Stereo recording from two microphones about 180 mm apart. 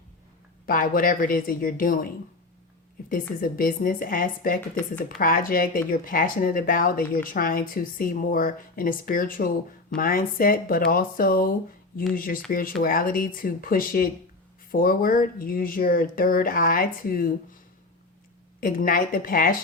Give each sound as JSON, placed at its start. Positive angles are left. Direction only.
{"t": 0.6, "sound": "speech", "side_deg": 50}
{"t": 3.1, "sound": "speech", "side_deg": 50}
{"t": 18.6, "sound": "speech", "side_deg": 50}